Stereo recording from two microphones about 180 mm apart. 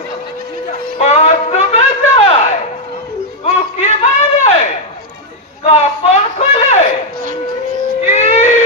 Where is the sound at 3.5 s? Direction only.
40° left (ahead or behind).